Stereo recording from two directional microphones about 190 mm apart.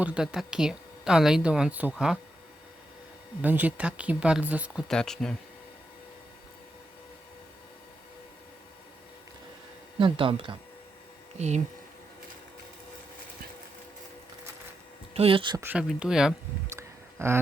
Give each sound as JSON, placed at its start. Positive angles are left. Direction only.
{"t": 0.0, "sound": "speech", "side_deg": -5}
{"t": 3.4, "sound": "speech", "side_deg": -10}
{"t": 10.0, "sound": "speech", "side_deg": -25}
{"t": 15.1, "sound": "speech", "side_deg": -30}
{"t": 15.6, "sound": "speech", "side_deg": -5}
{"t": 16.7, "sound": "a sound", "side_deg": -15}